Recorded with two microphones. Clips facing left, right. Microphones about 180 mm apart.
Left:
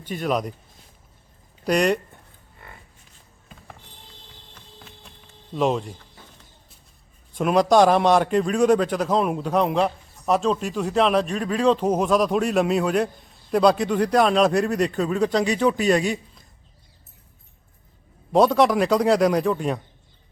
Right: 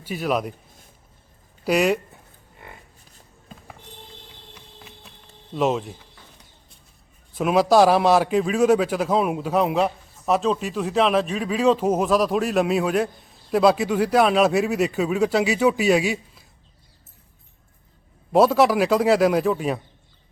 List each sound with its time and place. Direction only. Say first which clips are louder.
0.0 s a man's voice: even; 5° right (ahead or behind)
1.6 s speech: even; 5° right (ahead or behind)
4.5 s music: right 1 dB; 10° right (ahead or behind)
5.5 s a man's voice: even; centre (ahead or behind)
7.3 s a man's voice: even; 5° right (ahead or behind)
18.3 s a man's voice: right 1 dB; 5° right (ahead or behind)